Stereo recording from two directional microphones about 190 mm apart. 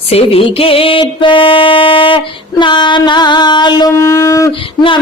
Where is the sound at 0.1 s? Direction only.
30° left (ahead or behind); by 4.5 s 15° left (ahead or behind).